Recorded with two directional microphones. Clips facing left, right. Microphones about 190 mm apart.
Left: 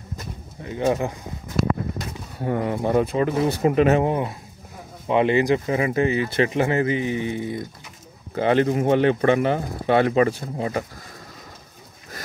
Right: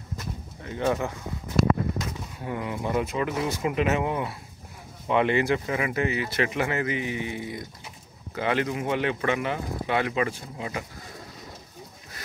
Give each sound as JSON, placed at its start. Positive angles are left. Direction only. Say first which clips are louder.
{"t": 0.7, "sound": "speech", "louder": "left 4 dB", "side_deg": 20}
{"t": 2.3, "sound": "speech", "louder": "left 9 dB", "side_deg": 45}
{"t": 5.0, "sound": "speech", "louder": "left 4 dB", "side_deg": 20}